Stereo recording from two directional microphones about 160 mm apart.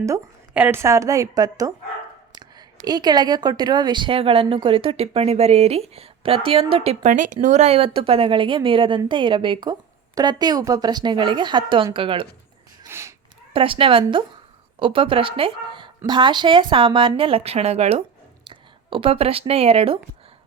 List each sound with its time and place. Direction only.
0.0 s speech: 15° right (ahead or behind); by 12.2 s 30° right (ahead or behind)
12.8 s a sound: 15° right (ahead or behind)
13.5 s speech: 35° right (ahead or behind)